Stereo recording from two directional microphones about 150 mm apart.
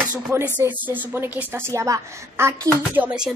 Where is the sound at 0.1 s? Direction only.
20° right (ahead or behind).